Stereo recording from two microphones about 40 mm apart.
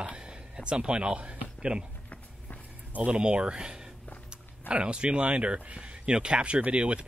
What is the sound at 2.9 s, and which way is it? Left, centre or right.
Speech, right.